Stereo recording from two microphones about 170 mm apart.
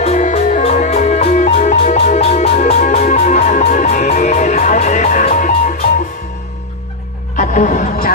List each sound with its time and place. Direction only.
0.0 s music: 40° left (ahead or behind)
7.3 s music: 45° left (ahead or behind)